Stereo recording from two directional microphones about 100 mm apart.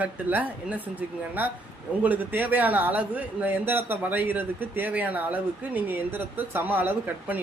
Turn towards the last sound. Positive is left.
turn(degrees=-20)  # may be behind; listen again after turning